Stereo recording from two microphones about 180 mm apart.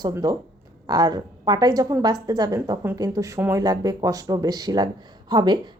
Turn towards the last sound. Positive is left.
turn(degrees=-25)  # may be behind; listen again after turning